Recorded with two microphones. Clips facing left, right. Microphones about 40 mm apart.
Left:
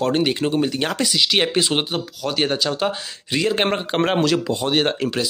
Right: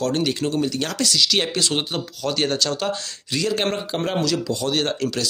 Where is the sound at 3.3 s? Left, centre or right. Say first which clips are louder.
Left 3 dB; left.